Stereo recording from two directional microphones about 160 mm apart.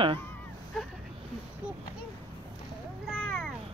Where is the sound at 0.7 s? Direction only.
5° left (ahead or behind).